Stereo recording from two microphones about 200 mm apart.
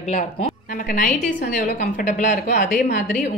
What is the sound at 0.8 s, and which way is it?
A woman's voice, 45° left (ahead or behind).